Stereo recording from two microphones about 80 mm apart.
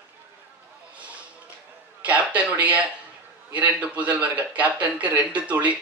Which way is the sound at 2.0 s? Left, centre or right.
Centre.